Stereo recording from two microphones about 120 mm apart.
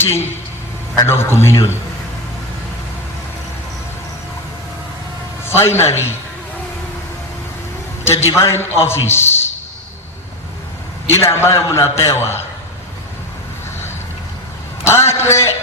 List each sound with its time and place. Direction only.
0.0 s a man's voice: 20° left (ahead or behind)
5.5 s a man's voice: 20° left (ahead or behind)
8.3 s a man's voice: 25° left (ahead or behind)
11.1 s a man's voice: 20° left (ahead or behind)
14.8 s a man's voice: 20° left (ahead or behind)